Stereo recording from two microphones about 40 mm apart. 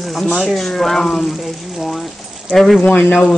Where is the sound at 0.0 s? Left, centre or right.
Centre.